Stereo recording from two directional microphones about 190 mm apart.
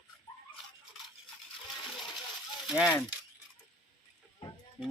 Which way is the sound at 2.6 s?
Centre (ahead or behind).